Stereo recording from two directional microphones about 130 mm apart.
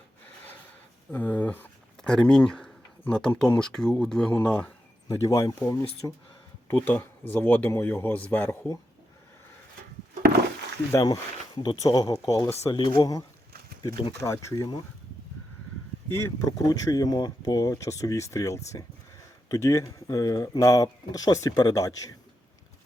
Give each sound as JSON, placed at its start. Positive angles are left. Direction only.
{"t": 1.1, "sound": "speech", "side_deg": 15}
{"t": 5.0, "sound": "speech", "side_deg": 25}
{"t": 10.9, "sound": "speech", "side_deg": 30}
{"t": 16.1, "sound": "speech", "side_deg": 30}